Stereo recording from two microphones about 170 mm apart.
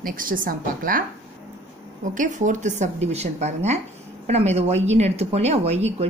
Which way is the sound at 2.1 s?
50° right (ahead or behind).